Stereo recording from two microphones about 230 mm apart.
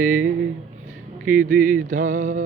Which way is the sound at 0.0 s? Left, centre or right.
Right.